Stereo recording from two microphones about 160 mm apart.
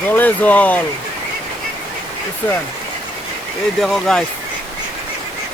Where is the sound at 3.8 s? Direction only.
Centre (ahead or behind).